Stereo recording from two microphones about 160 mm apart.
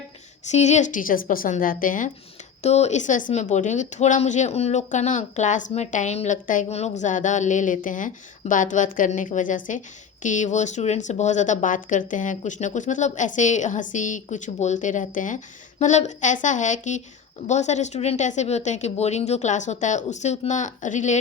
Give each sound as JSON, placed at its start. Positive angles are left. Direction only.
{"t": 0.5, "sound": "a woman's voice", "side_deg": 45}
{"t": 2.6, "sound": "speech", "side_deg": 45}